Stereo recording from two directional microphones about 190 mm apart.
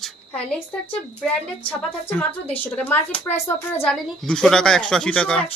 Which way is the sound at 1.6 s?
10° left (ahead or behind).